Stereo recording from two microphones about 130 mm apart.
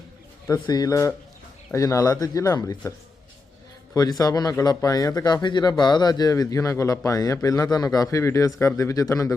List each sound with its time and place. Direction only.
0.6 s speech: 30° left (ahead or behind)
3.9 s speech: 30° left (ahead or behind)